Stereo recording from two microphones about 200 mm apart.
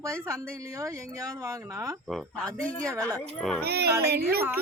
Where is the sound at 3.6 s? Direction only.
50° right (ahead or behind).